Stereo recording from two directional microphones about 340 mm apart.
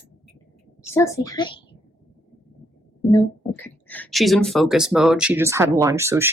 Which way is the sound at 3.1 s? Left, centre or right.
Centre.